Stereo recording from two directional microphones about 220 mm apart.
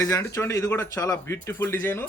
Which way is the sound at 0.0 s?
15° left (ahead or behind).